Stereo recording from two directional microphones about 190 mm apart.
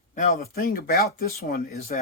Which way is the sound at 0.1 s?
45° left (ahead or behind).